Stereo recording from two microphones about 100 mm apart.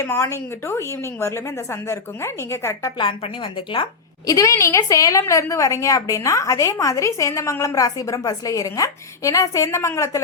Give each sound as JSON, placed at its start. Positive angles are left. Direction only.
{"t": 0.0, "sound": "a woman's voice", "side_deg": 25}
{"t": 3.0, "sound": "a woman's voice", "side_deg": 60}
{"t": 4.3, "sound": "a woman's voice", "side_deg": 35}